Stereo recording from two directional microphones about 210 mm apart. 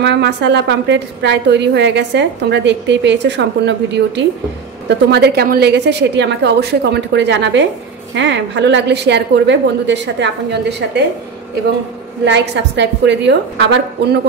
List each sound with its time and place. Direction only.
0.0 s a woman's voice: 55° right (ahead or behind)
12.3 s a woman's voice: 55° right (ahead or behind)